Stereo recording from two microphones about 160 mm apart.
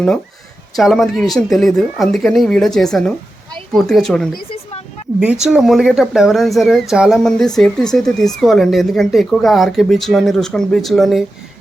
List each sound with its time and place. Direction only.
0.8 s speech: centre (ahead or behind)
4.4 s a sound: 35° left (ahead or behind)
5.2 s speech: 5° right (ahead or behind)